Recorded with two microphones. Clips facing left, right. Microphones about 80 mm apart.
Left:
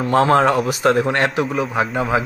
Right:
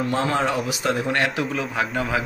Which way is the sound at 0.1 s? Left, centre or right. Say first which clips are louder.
Left 11 dB; left.